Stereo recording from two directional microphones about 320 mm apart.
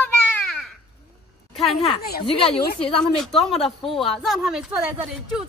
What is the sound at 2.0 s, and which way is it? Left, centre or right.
Speech, left.